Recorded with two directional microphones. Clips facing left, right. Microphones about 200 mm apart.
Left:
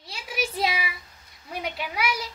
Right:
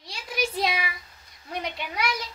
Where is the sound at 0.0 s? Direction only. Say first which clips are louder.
Right 1 dB; 5° left (ahead or behind).